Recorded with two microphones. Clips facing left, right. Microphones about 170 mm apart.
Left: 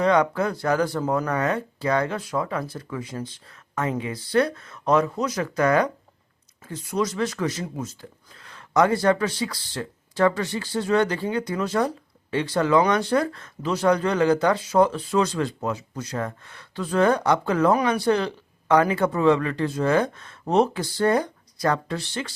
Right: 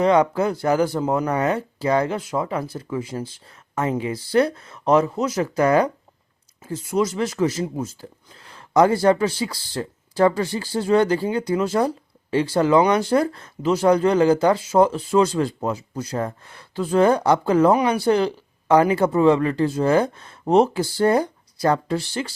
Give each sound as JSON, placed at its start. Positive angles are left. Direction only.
{"t": 0.0, "sound": "speech", "side_deg": -30}